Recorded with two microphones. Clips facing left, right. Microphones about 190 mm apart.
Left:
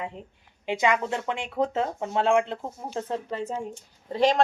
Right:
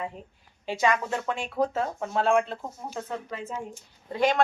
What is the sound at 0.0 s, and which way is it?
Speech, 20° left (ahead or behind).